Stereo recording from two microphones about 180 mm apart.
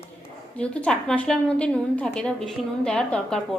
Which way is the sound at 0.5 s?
5° left (ahead or behind).